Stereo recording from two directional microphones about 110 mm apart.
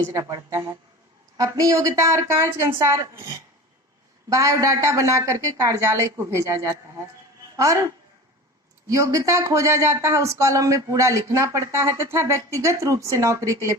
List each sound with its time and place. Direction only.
0.1 s speech: 30° right (ahead or behind)
4.3 s speech: 30° right (ahead or behind)
8.9 s speech: 30° right (ahead or behind)